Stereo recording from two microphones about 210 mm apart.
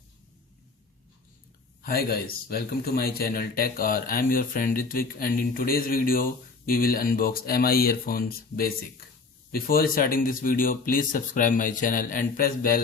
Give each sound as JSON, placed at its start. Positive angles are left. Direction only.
{"t": 1.8, "sound": "speech", "side_deg": 45}